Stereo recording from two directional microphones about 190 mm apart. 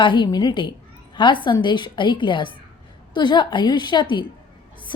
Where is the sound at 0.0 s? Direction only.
25° left (ahead or behind).